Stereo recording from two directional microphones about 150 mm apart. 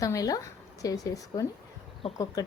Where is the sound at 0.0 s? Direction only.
20° left (ahead or behind).